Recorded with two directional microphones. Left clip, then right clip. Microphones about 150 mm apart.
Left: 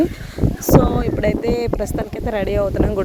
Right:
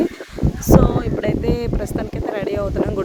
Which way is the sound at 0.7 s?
30° left (ahead or behind).